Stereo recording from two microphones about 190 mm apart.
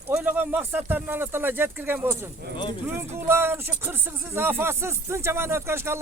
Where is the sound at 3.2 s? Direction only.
10° right (ahead or behind).